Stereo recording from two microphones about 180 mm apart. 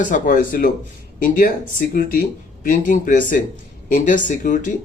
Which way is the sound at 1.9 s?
55° left (ahead or behind).